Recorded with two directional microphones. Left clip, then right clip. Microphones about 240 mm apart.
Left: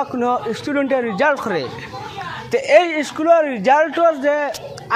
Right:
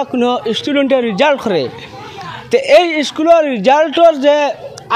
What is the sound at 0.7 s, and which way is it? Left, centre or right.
A man's voice, right.